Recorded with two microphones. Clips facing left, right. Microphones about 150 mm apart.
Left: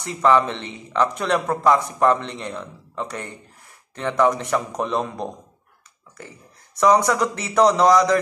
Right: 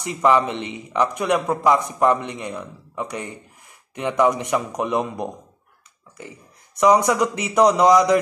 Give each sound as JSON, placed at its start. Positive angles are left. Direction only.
{"t": 0.0, "sound": "speech", "side_deg": -15}